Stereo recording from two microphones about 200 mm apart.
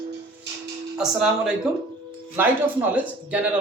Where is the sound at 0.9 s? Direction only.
5° right (ahead or behind).